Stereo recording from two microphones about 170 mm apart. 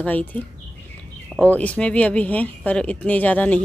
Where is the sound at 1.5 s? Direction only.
10° left (ahead or behind).